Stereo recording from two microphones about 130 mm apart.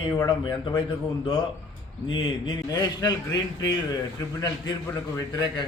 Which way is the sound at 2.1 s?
35° left (ahead or behind).